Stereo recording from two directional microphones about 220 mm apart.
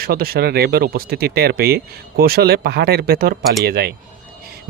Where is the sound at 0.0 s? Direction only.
45° right (ahead or behind).